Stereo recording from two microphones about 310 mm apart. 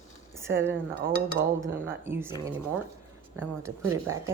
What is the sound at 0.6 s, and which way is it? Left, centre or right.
Speech, centre.